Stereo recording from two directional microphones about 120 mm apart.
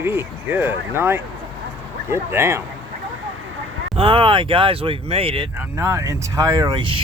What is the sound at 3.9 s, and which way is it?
Speech, 50° right (ahead or behind).